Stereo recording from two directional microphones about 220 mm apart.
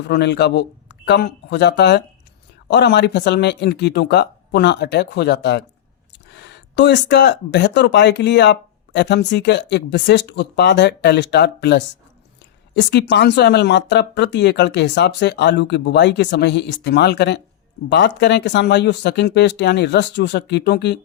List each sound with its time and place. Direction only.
0.1 s speech: 50° left (ahead or behind)